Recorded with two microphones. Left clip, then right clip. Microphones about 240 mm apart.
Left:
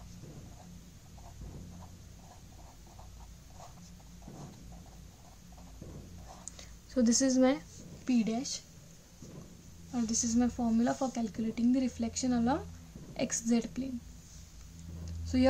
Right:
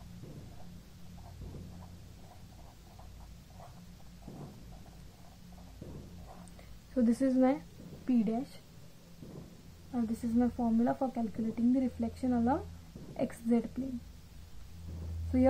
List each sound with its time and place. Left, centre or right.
7.0 s speech: left
9.9 s speech: left